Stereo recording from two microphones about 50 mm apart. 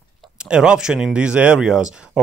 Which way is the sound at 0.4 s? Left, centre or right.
Centre.